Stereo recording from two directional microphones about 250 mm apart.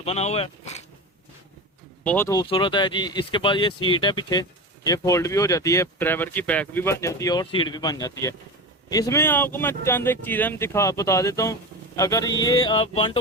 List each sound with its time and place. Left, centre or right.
0.0 s speech: left
2.0 s speech: centre